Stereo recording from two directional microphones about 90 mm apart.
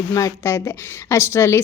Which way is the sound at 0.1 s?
40° left (ahead or behind).